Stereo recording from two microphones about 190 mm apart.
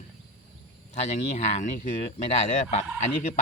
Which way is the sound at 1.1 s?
35° left (ahead or behind).